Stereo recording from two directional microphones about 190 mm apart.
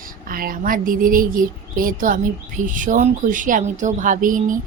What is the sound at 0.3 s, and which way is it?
A woman's voice, 50° right (ahead or behind).